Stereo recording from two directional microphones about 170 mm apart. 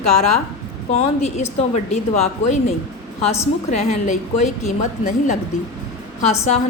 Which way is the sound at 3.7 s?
40° left (ahead or behind).